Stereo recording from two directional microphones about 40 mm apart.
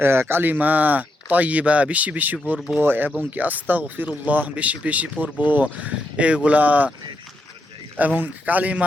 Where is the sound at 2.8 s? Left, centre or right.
Right.